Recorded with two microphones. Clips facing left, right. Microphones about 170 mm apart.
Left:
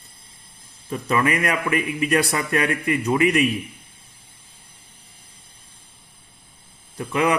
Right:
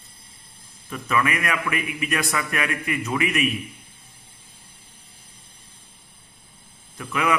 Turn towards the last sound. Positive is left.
turn(degrees=30)  # may be behind; listen again after turning